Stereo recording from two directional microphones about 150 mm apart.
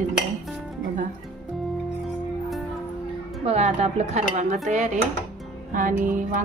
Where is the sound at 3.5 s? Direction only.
45° right (ahead or behind).